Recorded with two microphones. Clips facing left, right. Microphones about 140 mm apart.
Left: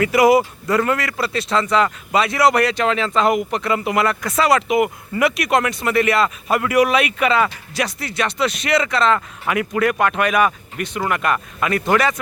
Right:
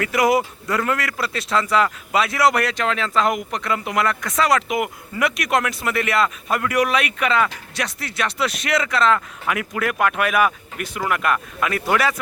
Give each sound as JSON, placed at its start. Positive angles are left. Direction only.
{"t": 0.0, "sound": "speech", "side_deg": 5}